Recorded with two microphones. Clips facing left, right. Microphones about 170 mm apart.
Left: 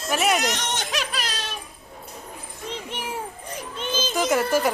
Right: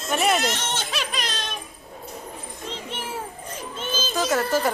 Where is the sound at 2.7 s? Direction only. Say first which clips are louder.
Left 1 dB; 15° left (ahead or behind).